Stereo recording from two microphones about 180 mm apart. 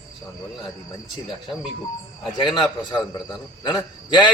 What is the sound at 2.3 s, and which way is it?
A man's voice, 25° left (ahead or behind).